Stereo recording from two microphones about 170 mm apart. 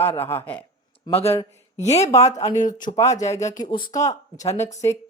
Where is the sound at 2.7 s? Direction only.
20° left (ahead or behind).